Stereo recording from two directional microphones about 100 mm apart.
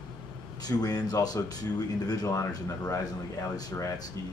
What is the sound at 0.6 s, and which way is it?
Speech, 40° left (ahead or behind).